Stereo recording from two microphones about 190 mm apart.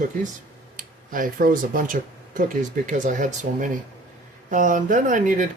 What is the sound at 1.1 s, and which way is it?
Speech, 45° right (ahead or behind).